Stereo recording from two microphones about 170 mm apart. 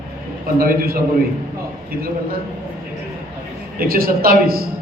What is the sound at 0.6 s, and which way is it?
Speech, 60° right (ahead or behind).